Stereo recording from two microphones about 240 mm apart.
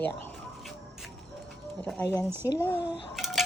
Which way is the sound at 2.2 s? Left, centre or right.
Centre.